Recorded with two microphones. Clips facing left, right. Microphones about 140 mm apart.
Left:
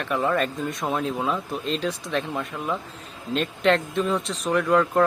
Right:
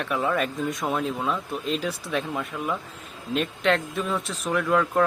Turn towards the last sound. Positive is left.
turn(degrees=0)  # may be behind; listen again after turning